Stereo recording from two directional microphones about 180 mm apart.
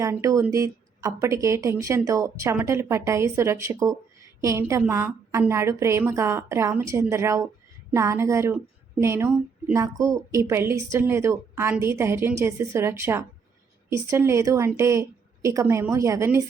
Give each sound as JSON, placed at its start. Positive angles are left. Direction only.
{"t": 0.0, "sound": "speech", "side_deg": -15}